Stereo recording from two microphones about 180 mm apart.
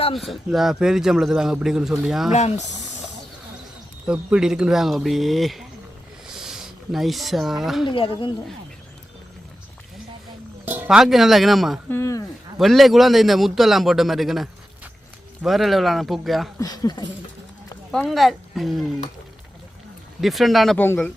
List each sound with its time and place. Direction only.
0.2 s a man's voice: centre (ahead or behind)
2.3 s speech: 40° left (ahead or behind)
4.0 s a man's voice: 5° right (ahead or behind)
6.2 s a sound: 5° right (ahead or behind)
7.9 s speech: 30° left (ahead or behind)
10.7 s a man's voice: 5° right (ahead or behind)
11.9 s speech: 15° left (ahead or behind)
12.5 s a man's voice: centre (ahead or behind)
16.6 s speech: 20° left (ahead or behind)
17.9 s a man's voice: centre (ahead or behind)
20.2 s a man's voice: centre (ahead or behind)
20.7 s speech: 10° left (ahead or behind)